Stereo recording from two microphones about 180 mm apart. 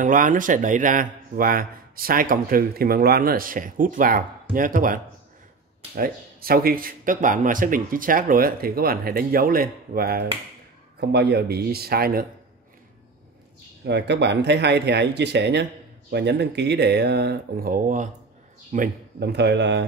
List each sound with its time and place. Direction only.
0.0 s speech: 45° right (ahead or behind)
13.8 s speech: 70° right (ahead or behind); by 18.9 s 40° right (ahead or behind)
19.1 s speech: 70° right (ahead or behind)